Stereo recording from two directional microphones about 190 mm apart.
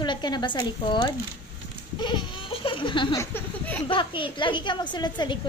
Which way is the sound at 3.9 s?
25° left (ahead or behind).